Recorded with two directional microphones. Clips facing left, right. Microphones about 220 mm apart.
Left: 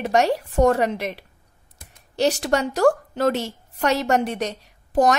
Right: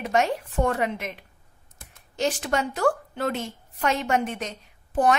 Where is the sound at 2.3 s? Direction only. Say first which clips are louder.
Left 5 dB; 40° left (ahead or behind).